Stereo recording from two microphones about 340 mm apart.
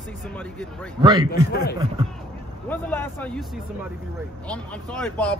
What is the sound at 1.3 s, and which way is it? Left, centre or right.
Speech, left.